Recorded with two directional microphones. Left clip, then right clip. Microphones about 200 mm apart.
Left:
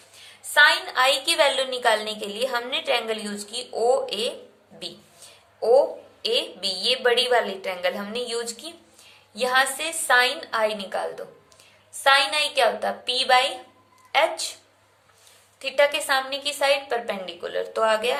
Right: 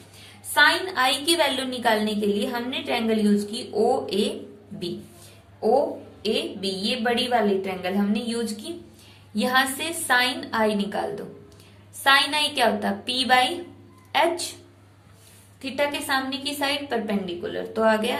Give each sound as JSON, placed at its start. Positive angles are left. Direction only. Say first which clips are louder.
{"t": 0.5, "sound": "a woman's voice", "louder": "left 2 dB", "side_deg": 20}
{"t": 6.2, "sound": "a woman's voice", "louder": "left 2 dB", "side_deg": 35}
{"t": 9.3, "sound": "a woman's voice", "louder": "left 1 dB", "side_deg": 20}
{"t": 15.6, "sound": "a woman's voice", "louder": "left 5 dB", "side_deg": 25}